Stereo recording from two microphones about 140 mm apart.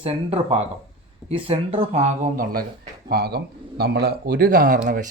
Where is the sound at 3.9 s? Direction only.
90° right.